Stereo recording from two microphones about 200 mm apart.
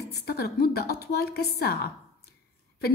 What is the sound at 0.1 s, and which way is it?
A woman's voice, 50° left (ahead or behind).